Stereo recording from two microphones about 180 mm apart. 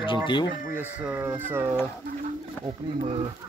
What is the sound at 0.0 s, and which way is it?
Speech, 25° left (ahead or behind).